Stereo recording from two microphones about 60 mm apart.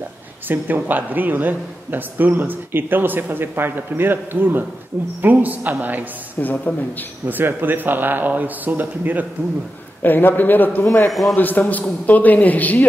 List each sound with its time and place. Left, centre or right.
0.5 s a man's voice: right
6.4 s a woman's voice: left
7.2 s a man's voice: right
10.0 s a man's voice: left
11.1 s a man's voice: centre
11.3 s a man's voice: left